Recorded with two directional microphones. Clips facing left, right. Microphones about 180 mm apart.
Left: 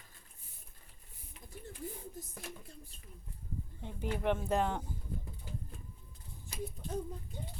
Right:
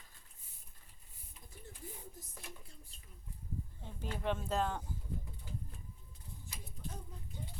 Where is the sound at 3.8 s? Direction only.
15° left (ahead or behind).